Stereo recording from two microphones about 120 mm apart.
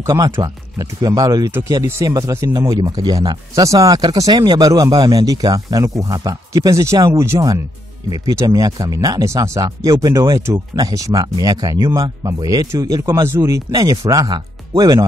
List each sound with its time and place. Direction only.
0.0 s speech: 30° right (ahead or behind)